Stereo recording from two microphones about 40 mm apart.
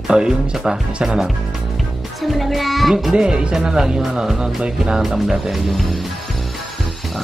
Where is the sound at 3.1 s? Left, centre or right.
Centre.